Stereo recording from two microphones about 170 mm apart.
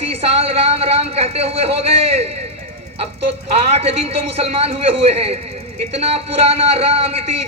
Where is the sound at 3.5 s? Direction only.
35° right (ahead or behind).